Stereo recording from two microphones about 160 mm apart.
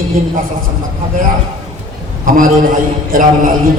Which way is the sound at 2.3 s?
60° right (ahead or behind).